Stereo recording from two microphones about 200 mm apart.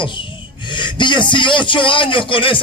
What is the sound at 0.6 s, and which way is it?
A man's voice, 25° left (ahead or behind).